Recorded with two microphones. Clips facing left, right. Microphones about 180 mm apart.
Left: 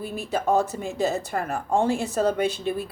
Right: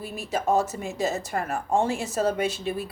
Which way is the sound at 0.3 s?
35° left (ahead or behind).